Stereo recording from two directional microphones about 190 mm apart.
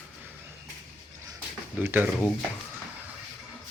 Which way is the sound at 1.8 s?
10° right (ahead or behind).